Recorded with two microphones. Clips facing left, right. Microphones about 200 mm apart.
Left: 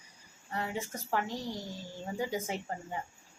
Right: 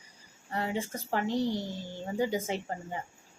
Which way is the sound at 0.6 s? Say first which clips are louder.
Right 7 dB; 30° right (ahead or behind).